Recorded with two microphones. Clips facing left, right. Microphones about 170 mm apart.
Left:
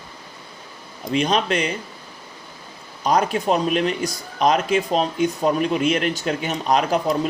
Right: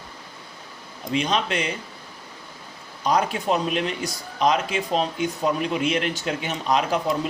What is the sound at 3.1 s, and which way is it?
Speech, 45° left (ahead or behind).